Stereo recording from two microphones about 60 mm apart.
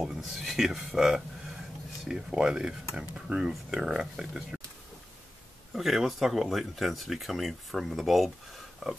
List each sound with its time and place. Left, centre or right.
0.0 s speech: centre
5.7 s speech: centre